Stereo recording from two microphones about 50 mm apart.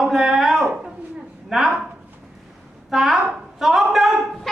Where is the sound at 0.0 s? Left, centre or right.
Centre.